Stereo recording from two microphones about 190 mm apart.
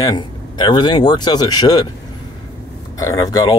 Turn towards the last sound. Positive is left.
turn(degrees=20)  # may be behind; listen again after turning